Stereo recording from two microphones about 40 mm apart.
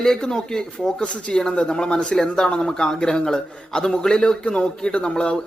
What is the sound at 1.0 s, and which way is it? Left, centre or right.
Speech, left.